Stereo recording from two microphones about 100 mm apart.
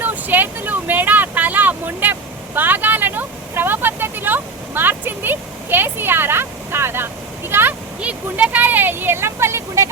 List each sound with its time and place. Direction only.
0.0 s vehicle: 20° right (ahead or behind)
2.6 s speech: 20° right (ahead or behind)